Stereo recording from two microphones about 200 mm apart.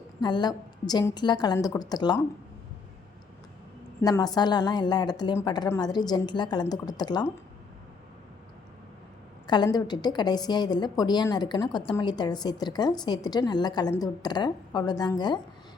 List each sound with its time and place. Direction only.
0.2 s a woman's voice: 20° left (ahead or behind)
4.0 s a woman's voice: 20° left (ahead or behind)
9.5 s a woman's voice: 20° left (ahead or behind)